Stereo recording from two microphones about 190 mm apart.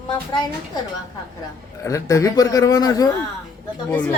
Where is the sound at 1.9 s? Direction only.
15° left (ahead or behind).